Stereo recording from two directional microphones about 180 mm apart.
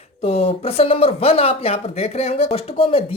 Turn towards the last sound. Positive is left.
turn(degrees=30)  # may be behind; listen again after turning